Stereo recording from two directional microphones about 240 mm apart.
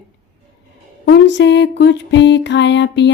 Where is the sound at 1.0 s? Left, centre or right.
Left.